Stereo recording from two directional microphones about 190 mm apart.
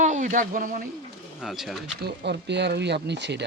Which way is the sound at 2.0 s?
60° right (ahead or behind).